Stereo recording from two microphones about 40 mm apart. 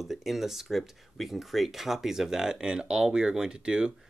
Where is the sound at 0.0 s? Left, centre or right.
Centre.